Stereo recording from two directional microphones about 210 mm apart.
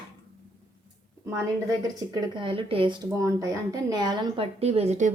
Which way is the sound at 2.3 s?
25° right (ahead or behind).